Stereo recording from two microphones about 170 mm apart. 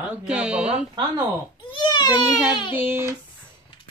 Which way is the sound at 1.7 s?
25° left (ahead or behind).